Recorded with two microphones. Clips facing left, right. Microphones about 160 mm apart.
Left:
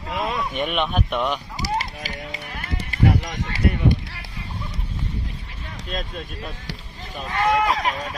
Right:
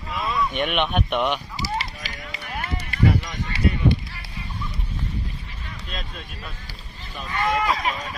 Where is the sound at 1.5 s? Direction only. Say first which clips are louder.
Left 2 dB; 45° left (ahead or behind).